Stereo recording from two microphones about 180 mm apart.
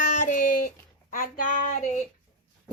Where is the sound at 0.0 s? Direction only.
50° left (ahead or behind).